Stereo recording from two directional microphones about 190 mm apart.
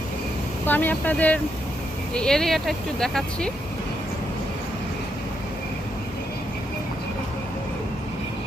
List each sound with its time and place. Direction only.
0.6 s speech: 10° left (ahead or behind)